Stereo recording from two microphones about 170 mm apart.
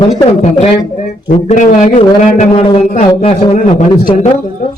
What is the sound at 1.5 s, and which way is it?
A man's voice, 45° left (ahead or behind).